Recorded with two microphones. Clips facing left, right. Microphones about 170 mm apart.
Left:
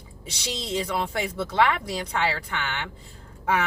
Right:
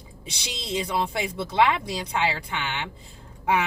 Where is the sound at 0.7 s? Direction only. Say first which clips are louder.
Right 1 dB; 15° right (ahead or behind).